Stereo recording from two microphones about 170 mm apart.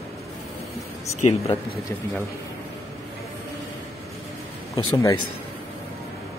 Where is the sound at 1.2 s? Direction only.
35° left (ahead or behind).